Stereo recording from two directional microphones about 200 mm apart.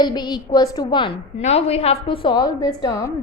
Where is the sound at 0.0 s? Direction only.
20° left (ahead or behind).